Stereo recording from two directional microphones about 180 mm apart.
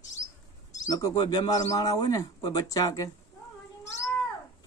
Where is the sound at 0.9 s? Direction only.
20° left (ahead or behind).